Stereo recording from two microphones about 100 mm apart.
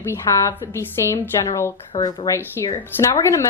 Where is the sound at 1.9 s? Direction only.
60° left (ahead or behind).